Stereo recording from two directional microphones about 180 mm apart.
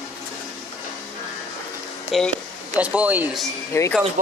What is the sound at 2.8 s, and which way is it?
Speech, 5° right (ahead or behind).